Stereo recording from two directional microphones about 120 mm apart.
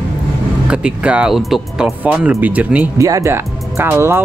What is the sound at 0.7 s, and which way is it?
Speech, 10° right (ahead or behind).